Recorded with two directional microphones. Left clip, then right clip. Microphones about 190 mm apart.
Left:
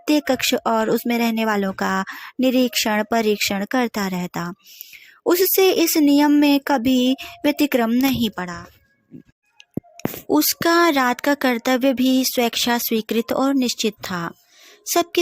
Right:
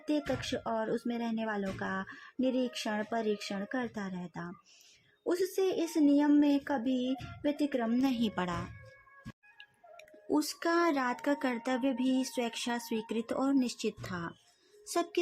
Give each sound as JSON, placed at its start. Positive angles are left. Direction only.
{"t": 0.0, "sound": "speech", "side_deg": 40}
{"t": 5.2, "sound": "a sound", "side_deg": 45}
{"t": 8.4, "sound": "a woman's voice", "side_deg": 20}
{"t": 10.2, "sound": "speech", "side_deg": 35}